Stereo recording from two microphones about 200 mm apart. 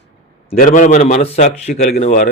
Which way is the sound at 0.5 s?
45° left (ahead or behind).